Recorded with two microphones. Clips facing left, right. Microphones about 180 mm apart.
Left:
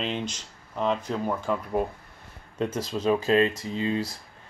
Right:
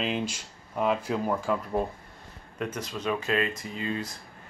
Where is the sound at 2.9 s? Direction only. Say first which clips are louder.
Left 7 dB; 30° left (ahead or behind).